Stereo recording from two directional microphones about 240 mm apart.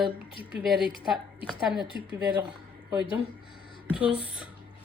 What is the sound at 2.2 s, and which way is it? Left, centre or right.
Speech, centre.